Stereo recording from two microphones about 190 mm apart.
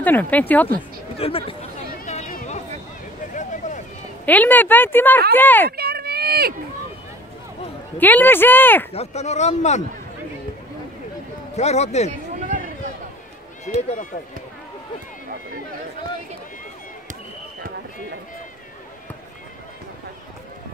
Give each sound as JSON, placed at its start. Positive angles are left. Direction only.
{"t": 0.0, "sound": "speech", "side_deg": 10}
{"t": 1.1, "sound": "a sound", "side_deg": 30}
{"t": 4.3, "sound": "speech", "side_deg": 10}
{"t": 5.7, "sound": "a sound", "side_deg": -55}
{"t": 8.0, "sound": "speech", "side_deg": 10}
{"t": 8.9, "sound": "a man's voice", "side_deg": 35}
{"t": 11.5, "sound": "a man's voice", "side_deg": 35}
{"t": 12.4, "sound": "run", "side_deg": -45}
{"t": 13.7, "sound": "a man's voice", "side_deg": 35}